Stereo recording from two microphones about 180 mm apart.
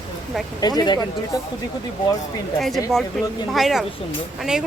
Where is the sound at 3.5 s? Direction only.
Centre (ahead or behind).